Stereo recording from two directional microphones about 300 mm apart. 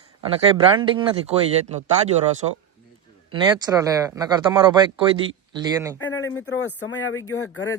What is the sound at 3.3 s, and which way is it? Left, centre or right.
Speech, centre.